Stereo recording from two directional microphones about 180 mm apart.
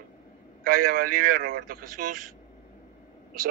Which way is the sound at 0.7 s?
50° right (ahead or behind).